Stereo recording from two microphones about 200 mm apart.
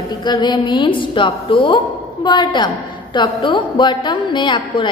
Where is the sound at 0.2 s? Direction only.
20° left (ahead or behind).